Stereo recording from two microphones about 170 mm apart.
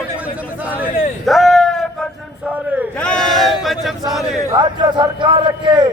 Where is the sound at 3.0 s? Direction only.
5° left (ahead or behind).